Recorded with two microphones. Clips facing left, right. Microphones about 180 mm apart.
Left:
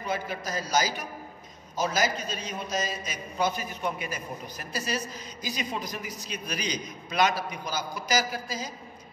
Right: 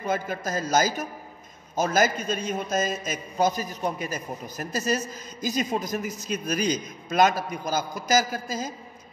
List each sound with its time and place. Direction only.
0.0 s a man's voice: 50° right (ahead or behind)